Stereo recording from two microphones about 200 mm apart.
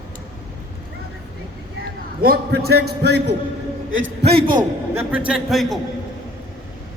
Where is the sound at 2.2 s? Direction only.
50° right (ahead or behind).